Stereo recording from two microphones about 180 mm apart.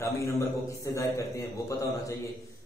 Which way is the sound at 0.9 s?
20° left (ahead or behind).